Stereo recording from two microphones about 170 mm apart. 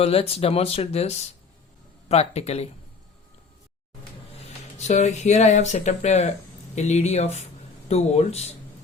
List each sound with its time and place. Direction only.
0.0 s speech: 35° left (ahead or behind)
4.9 s speech: 45° left (ahead or behind)